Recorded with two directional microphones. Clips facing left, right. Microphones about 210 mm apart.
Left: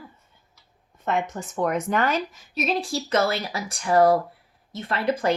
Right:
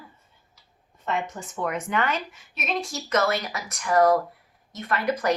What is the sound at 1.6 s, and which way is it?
A woman's voice, 40° left (ahead or behind).